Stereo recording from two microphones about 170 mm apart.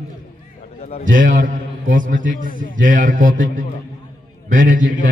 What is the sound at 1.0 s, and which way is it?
A man's voice, 50° right (ahead or behind).